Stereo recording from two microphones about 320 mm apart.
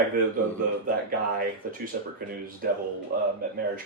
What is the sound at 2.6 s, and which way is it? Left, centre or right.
Speech, right.